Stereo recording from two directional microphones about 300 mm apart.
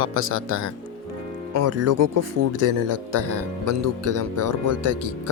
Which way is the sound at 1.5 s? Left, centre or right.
Right.